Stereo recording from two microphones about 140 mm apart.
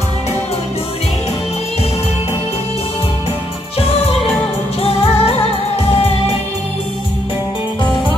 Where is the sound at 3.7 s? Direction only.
45° left (ahead or behind).